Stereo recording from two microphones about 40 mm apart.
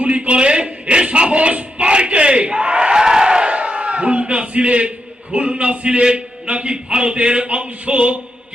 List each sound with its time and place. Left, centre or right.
0.0 s speech: right
2.9 s a sound: centre; by 4.9 s right
5.3 s a man's voice: right